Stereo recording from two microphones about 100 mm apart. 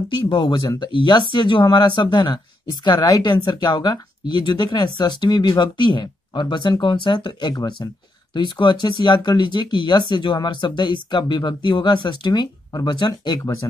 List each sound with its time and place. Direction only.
0.2 s speech: 50° left (ahead or behind)